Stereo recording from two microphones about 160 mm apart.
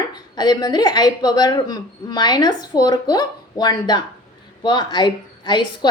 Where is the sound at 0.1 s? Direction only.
25° left (ahead or behind).